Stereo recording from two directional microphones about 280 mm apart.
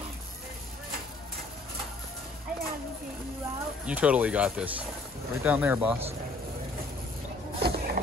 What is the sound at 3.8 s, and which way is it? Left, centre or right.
Speech, centre.